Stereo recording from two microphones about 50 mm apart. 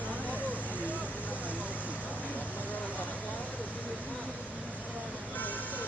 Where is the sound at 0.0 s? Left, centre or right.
Right.